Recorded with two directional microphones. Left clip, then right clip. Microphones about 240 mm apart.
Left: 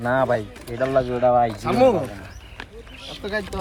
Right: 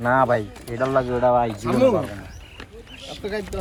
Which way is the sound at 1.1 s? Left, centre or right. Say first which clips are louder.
Left 1 dB; centre.